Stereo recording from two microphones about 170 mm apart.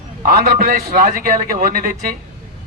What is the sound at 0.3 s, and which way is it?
A man's voice, 60° right (ahead or behind).